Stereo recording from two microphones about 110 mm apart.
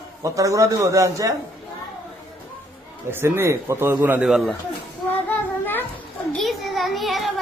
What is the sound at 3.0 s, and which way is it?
Speech, 20° right (ahead or behind).